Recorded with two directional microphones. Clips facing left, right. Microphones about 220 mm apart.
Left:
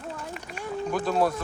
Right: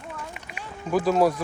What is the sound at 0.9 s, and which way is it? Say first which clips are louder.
Speech: right 5 dB; 5° right (ahead or behind).